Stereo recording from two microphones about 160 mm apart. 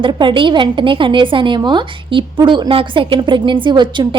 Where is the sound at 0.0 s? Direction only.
30° right (ahead or behind).